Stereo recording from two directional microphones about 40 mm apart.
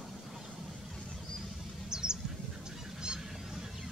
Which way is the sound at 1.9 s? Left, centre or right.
Centre.